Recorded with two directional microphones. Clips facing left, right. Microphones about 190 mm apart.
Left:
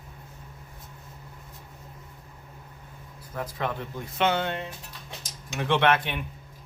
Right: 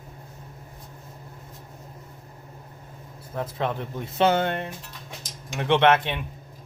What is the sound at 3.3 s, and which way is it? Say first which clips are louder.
Speech: right 3 dB; 25° right (ahead or behind).